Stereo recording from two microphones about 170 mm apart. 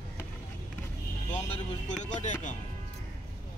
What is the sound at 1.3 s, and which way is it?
Speech, 40° left (ahead or behind).